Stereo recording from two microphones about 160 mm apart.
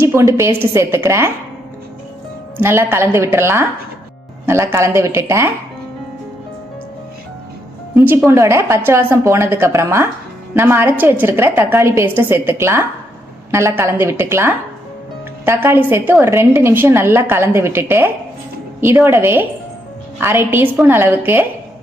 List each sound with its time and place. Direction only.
0.0 s a woman's voice: 15° right (ahead or behind)
2.6 s a woman's voice: 15° right (ahead or behind)
7.9 s a woman's voice: 15° right (ahead or behind)